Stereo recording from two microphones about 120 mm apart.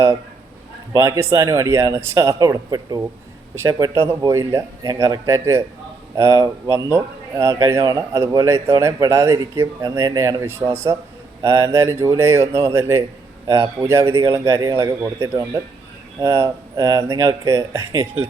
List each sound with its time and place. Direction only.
0.9 s speech: 25° right (ahead or behind)